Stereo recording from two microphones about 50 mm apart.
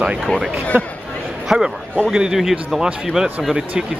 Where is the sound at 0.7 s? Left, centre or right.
Right.